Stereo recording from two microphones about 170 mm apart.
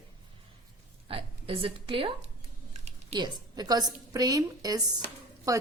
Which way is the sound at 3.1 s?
25° right (ahead or behind).